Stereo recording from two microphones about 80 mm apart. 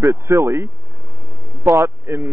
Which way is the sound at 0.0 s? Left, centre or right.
Right.